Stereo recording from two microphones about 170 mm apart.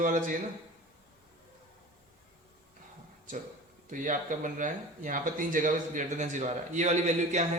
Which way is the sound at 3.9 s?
50° right (ahead or behind).